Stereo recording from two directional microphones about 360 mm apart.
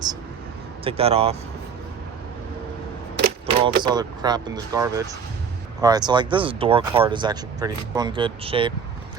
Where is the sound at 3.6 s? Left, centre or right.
Centre.